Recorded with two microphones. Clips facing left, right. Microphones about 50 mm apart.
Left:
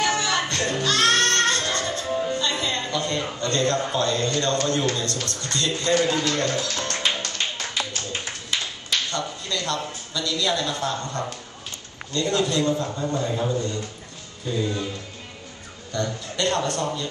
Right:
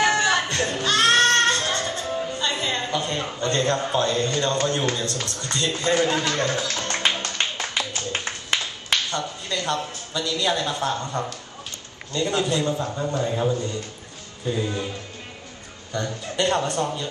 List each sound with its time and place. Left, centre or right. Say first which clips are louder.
0.0 s music: right 3 dB; right
2.0 s music: left 2 dB; centre
2.4 s music: even; centre
3.4 s speech: right 1 dB; centre
8.1 s a sound: right 3 dB; right
9.1 s speech: even; centre
15.9 s a man's voice: right 1 dB; centre